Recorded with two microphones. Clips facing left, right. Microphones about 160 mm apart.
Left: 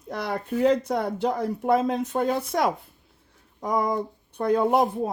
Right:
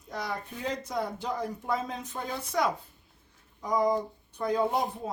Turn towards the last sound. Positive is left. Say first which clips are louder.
# left 7 dB
turn(degrees=60)  # may be behind; listen again after turning